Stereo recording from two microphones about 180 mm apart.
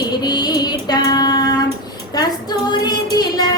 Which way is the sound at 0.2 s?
20° left (ahead or behind).